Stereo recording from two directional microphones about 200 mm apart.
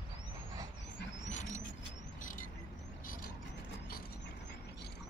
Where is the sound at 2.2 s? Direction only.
40° left (ahead or behind).